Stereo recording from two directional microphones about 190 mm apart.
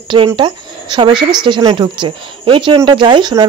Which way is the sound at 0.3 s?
25° right (ahead or behind).